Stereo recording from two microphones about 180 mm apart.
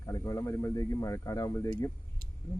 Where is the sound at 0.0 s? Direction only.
20° left (ahead or behind).